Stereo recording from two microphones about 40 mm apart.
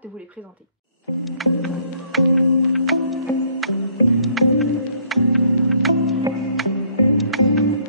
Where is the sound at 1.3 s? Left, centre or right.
Centre.